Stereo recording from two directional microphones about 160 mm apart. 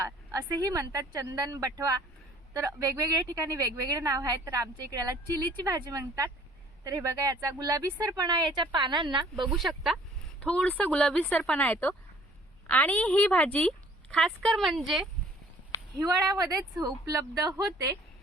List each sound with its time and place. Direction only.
0.0 s speech: 20° right (ahead or behind)
9.5 s a woman's voice: centre (ahead or behind)
16.3 s speech: 20° right (ahead or behind)